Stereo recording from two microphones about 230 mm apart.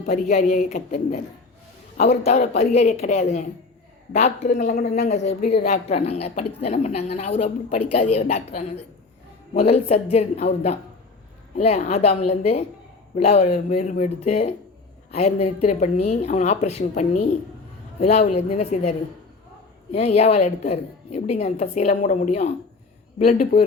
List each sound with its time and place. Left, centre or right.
0.0 s a woman's voice: left